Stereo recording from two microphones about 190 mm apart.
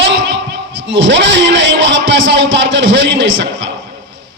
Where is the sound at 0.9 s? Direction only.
75° right (ahead or behind).